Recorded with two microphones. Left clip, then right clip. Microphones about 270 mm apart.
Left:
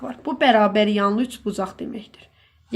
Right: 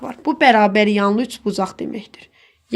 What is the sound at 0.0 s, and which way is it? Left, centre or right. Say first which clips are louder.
Speech: right 5 dB; right.